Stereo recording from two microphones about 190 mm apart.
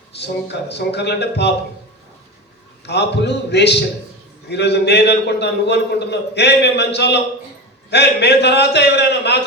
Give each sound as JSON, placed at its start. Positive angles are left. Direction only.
{"t": 0.2, "sound": "a man's voice", "side_deg": 60}
{"t": 2.8, "sound": "a man's voice", "side_deg": 60}